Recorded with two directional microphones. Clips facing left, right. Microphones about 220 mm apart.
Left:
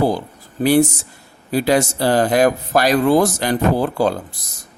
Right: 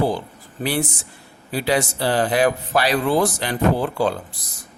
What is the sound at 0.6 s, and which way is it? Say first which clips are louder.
Speech: left 9 dB; 40° left (ahead or behind).